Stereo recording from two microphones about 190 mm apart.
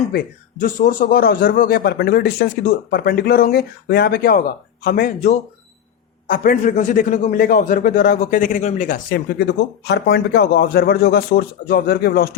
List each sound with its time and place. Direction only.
0.6 s a man's voice: 45° left (ahead or behind)
6.2 s a man's voice: 45° left (ahead or behind)
9.0 s a man's voice: 60° left (ahead or behind)